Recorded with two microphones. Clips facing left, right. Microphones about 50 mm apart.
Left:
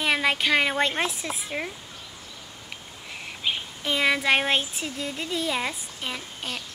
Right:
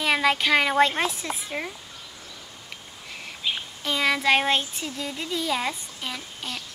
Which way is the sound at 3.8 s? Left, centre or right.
Centre.